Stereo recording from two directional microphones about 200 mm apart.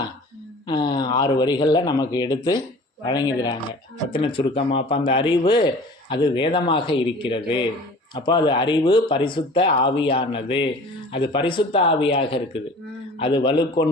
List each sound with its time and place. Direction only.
0.7 s a man's voice: 20° left (ahead or behind)